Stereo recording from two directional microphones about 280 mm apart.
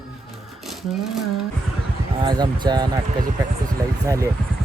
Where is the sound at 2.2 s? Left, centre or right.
Centre.